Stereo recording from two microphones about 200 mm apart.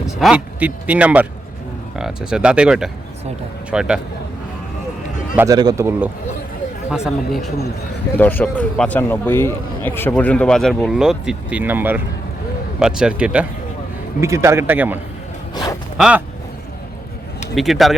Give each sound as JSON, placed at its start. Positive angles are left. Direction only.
{"t": 0.2, "sound": "a man's voice", "side_deg": -5}
{"t": 5.4, "sound": "speech", "side_deg": -20}
{"t": 6.9, "sound": "a man's voice", "side_deg": 0}
{"t": 15.5, "sound": "a sound", "side_deg": 20}
{"t": 16.0, "sound": "a man's voice", "side_deg": -5}
{"t": 17.5, "sound": "a man's voice", "side_deg": 0}